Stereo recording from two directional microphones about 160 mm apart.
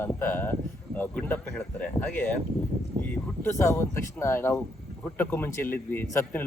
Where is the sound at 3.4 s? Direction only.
15° left (ahead or behind).